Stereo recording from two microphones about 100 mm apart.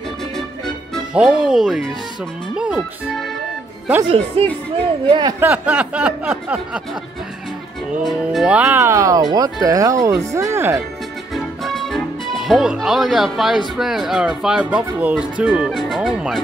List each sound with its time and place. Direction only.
1.1 s speech: 10° right (ahead or behind)
2.5 s music: 10° right (ahead or behind)
4.4 s speech: 80° right
5.0 s speech: 50° right (ahead or behind)
5.4 s speech: 15° right (ahead or behind)
8.2 s speech: 5° right (ahead or behind)
8.7 s speech: 25° right (ahead or behind)
11.3 s music: centre (ahead or behind)
13.7 s speech: 5° right (ahead or behind)
15.7 s speech: centre (ahead or behind)